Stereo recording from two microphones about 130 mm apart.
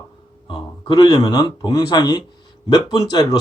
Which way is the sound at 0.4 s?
40° left (ahead or behind).